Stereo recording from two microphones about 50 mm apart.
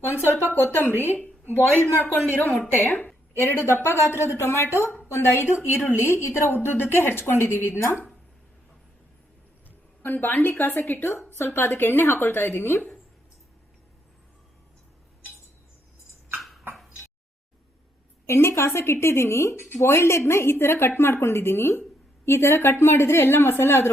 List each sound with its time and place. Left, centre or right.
0.1 s a sound: left
0.5 s a woman's voice: left
3.3 s a woman's voice: left
6.5 s a woman's voice: left
10.0 s a woman's voice: left
16.4 s a sound: centre
18.3 s a woman's voice: left